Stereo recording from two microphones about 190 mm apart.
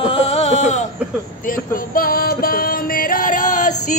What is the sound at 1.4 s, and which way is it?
Music, 45° left (ahead or behind).